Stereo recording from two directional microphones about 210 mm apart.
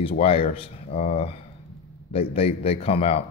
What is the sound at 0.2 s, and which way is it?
Speech, 25° left (ahead or behind).